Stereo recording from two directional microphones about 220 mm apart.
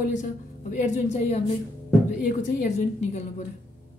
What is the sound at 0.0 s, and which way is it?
Speech, 35° left (ahead or behind).